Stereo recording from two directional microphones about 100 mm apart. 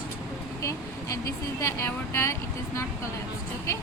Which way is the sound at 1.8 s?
25° left (ahead or behind).